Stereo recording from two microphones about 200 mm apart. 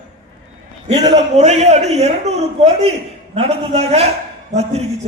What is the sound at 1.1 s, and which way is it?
A man's voice, 35° right (ahead or behind).